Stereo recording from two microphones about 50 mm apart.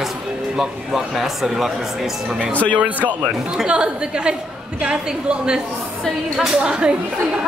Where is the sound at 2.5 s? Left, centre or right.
Left.